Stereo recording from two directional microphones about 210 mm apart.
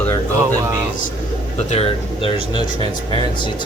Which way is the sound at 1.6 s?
30° left (ahead or behind).